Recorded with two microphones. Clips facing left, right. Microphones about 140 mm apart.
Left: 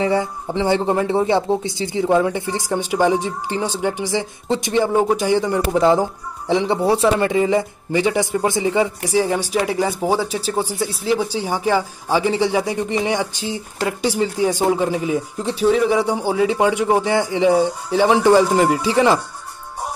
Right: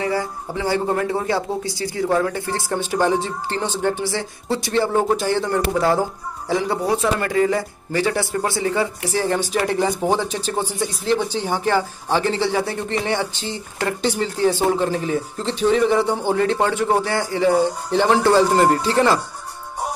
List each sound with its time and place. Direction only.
0.0 s speech: 25° left (ahead or behind)